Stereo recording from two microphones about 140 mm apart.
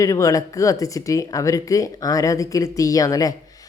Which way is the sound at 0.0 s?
25° left (ahead or behind).